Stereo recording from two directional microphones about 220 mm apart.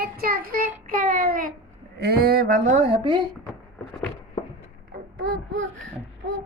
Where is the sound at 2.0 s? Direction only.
45° right (ahead or behind); by 3.2 s 25° right (ahead or behind).